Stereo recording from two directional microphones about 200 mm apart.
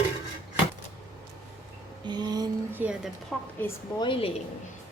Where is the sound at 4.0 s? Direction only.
25° left (ahead or behind).